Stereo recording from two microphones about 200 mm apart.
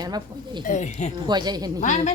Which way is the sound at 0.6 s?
40° left (ahead or behind).